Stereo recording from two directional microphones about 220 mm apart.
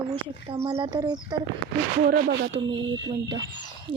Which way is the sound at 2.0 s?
45° right (ahead or behind).